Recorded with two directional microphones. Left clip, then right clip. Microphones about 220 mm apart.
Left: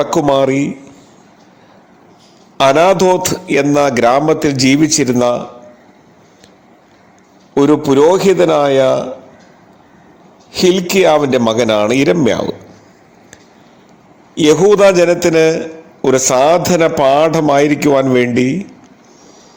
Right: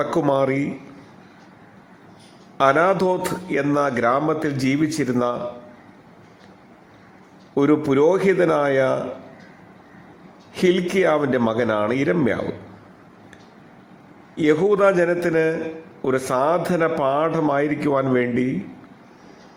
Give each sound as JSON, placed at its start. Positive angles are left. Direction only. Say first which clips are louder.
{"t": 0.0, "sound": "a man's voice", "louder": "left 8 dB", "side_deg": 10}
{"t": 2.6, "sound": "a man's voice", "louder": "left 8 dB", "side_deg": 15}
{"t": 7.5, "sound": "a man's voice", "louder": "left 8 dB", "side_deg": 10}
{"t": 10.5, "sound": "a man's voice", "louder": "left 7 dB", "side_deg": 10}
{"t": 14.3, "sound": "a man's voice", "louder": "left 9 dB", "side_deg": 20}